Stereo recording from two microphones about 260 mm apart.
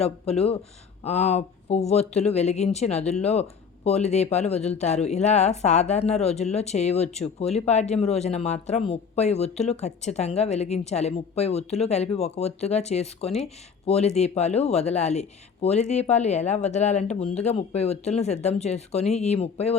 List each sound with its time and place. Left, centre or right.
0.0 s speech: left